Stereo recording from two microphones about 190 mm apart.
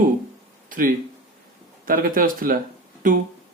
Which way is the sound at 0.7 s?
45° right (ahead or behind).